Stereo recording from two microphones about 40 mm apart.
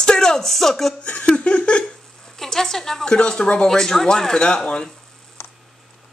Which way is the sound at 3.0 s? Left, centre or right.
Left.